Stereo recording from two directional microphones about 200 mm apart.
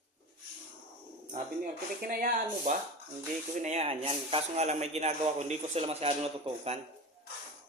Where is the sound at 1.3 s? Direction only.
40° right (ahead or behind).